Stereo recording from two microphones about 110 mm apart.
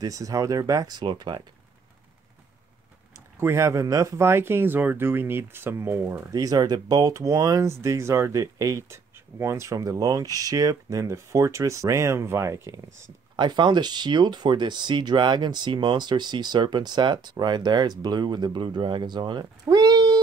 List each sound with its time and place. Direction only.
0.0 s speech: 30° right (ahead or behind)
3.3 s speech: 25° right (ahead or behind)
6.3 s speech: 35° right (ahead or behind)
13.4 s speech: 45° right (ahead or behind)